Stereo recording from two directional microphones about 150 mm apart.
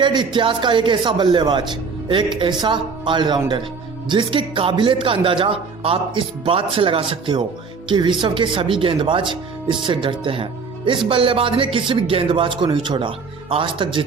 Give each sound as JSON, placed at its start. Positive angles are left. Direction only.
{"t": 0.0, "sound": "speech", "side_deg": -30}